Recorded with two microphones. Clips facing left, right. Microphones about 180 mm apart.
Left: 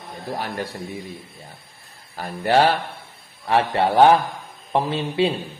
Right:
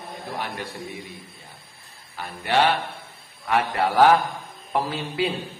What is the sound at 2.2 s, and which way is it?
Speech, 40° left (ahead or behind).